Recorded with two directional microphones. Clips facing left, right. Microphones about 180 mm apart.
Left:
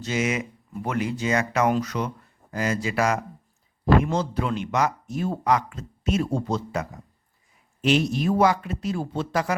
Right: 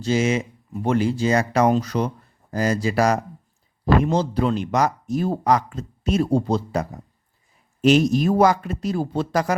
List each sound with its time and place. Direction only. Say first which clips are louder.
0.0 s speech: right 5 dB; 30° right (ahead or behind)